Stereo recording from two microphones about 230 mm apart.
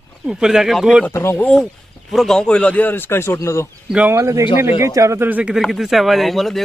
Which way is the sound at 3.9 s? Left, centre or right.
Centre.